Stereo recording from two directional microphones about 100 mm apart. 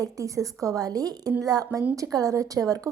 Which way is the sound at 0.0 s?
35° right (ahead or behind).